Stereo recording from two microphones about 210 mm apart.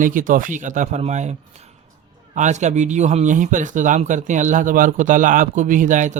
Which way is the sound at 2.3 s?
35° right (ahead or behind).